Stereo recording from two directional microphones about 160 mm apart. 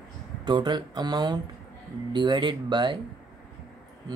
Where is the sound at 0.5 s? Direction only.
30° right (ahead or behind).